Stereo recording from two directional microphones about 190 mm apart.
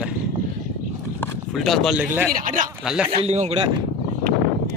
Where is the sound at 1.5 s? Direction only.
Centre (ahead or behind).